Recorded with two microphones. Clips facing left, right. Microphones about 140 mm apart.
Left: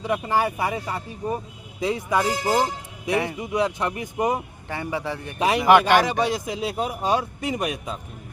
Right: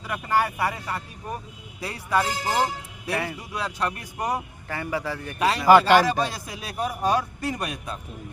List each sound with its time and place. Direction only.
0.0 s speech: 20° left (ahead or behind)